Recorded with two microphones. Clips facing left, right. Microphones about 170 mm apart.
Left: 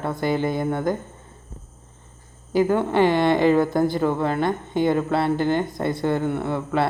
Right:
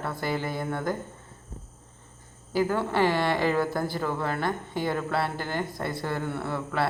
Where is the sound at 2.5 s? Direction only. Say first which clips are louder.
Left 6 dB; 20° left (ahead or behind).